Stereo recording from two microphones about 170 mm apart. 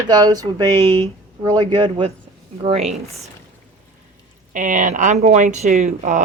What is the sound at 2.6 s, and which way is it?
Speech, 40° right (ahead or behind).